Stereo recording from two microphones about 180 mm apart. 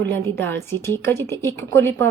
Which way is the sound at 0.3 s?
15° left (ahead or behind).